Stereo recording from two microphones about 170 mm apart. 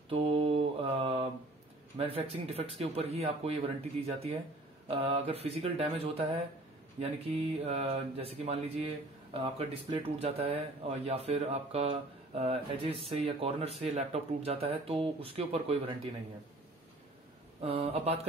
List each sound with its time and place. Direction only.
0.1 s mantra: 35° right (ahead or behind)
2.0 s speech: 35° right (ahead or behind)
17.6 s speech: 35° right (ahead or behind)